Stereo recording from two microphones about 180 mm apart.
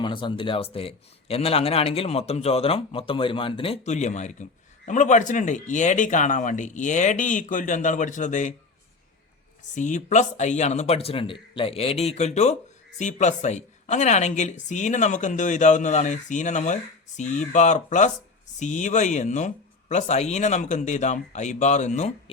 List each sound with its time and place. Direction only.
0.0 s a man's voice: 25° left (ahead or behind); by 8.5 s 45° left (ahead or behind)
9.7 s a man's voice: 45° left (ahead or behind)